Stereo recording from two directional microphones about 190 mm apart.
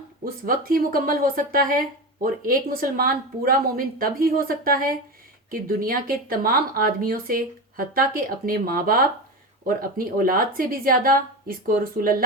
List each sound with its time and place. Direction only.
0.4 s speech: 50° right (ahead or behind)